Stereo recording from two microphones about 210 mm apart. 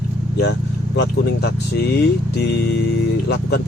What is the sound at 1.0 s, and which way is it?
Speech, 50° left (ahead or behind).